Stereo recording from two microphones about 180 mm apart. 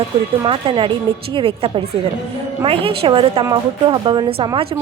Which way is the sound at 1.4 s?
30° right (ahead or behind).